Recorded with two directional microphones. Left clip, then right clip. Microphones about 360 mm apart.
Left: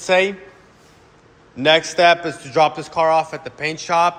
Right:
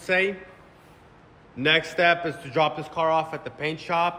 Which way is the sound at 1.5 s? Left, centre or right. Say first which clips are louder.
Left 7 dB; centre.